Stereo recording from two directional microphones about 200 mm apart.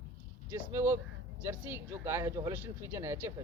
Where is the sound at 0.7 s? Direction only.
15° right (ahead or behind).